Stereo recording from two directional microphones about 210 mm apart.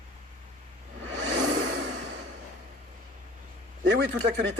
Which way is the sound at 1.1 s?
60° right (ahead or behind).